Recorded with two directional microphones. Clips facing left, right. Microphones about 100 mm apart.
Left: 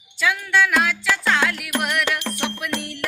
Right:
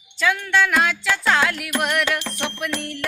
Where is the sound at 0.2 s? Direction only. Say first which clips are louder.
Even; 5° left (ahead or behind).